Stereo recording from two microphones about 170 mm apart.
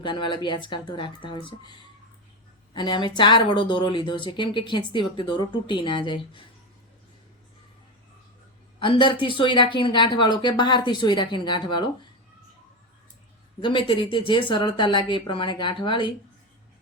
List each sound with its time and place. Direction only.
0.0 s a woman's voice: 30° left (ahead or behind)
2.7 s a woman's voice: 25° left (ahead or behind)
8.8 s a woman's voice: 30° left (ahead or behind)
13.6 s a woman's voice: 30° left (ahead or behind)